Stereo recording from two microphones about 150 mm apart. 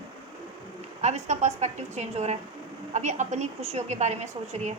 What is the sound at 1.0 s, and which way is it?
A woman's voice, 50° right (ahead or behind).